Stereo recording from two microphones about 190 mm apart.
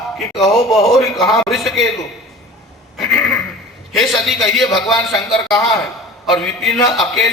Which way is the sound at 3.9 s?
Centre (ahead or behind).